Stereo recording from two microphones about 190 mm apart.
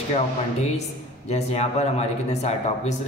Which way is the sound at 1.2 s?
35° left (ahead or behind).